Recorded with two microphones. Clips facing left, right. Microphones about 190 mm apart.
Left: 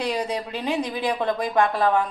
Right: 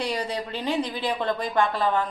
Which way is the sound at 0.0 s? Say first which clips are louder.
Left 2 dB; 5° left (ahead or behind).